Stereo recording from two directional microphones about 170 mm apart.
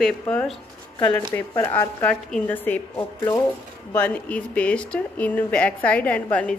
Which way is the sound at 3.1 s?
25° left (ahead or behind).